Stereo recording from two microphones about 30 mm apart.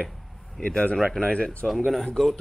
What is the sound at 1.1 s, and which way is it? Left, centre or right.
Speech, left.